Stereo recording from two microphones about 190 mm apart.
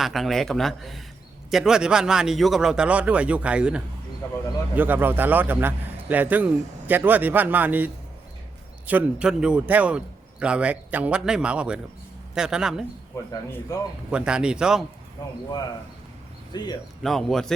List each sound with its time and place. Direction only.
0.0 s a man's voice: centre (ahead or behind)
4.2 s speech: 15° left (ahead or behind)
4.7 s a man's voice: 10° right (ahead or behind)
8.9 s a man's voice: 5° right (ahead or behind)
13.3 s speech: 20° left (ahead or behind)
14.1 s a man's voice: 5° right (ahead or behind)
16.5 s speech: 20° left (ahead or behind)
17.0 s a man's voice: centre (ahead or behind)